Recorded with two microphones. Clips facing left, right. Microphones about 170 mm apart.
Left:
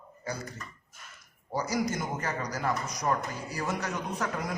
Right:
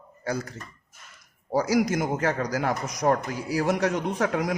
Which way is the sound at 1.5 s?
90° right.